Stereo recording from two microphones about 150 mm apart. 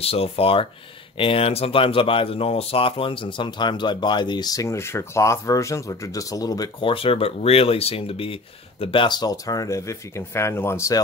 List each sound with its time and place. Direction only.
0.0 s speech: 40° left (ahead or behind); by 6.9 s 25° left (ahead or behind)
6.9 s speech: 40° left (ahead or behind); by 11.0 s 20° left (ahead or behind)